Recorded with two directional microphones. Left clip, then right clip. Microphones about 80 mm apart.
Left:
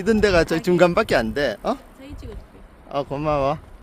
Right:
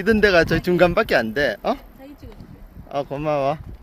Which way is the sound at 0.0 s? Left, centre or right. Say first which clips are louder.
Right 2 dB; right.